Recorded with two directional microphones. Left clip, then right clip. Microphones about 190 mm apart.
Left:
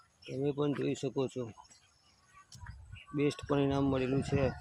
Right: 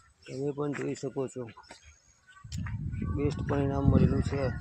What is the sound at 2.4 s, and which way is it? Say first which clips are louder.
Speech: right 11 dB; 35° right (ahead or behind).